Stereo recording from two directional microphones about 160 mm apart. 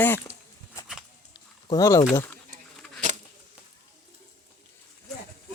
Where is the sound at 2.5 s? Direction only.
50° right (ahead or behind).